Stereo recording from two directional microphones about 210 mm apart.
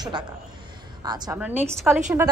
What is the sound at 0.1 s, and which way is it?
A woman's voice, 20° right (ahead or behind).